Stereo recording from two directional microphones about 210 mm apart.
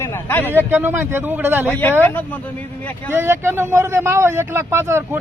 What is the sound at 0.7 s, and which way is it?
Speech, 10° right (ahead or behind).